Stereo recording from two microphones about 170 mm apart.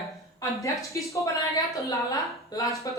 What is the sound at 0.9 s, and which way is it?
Speech, 20° left (ahead or behind).